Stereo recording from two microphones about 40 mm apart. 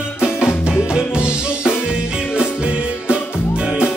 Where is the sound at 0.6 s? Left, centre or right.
Centre.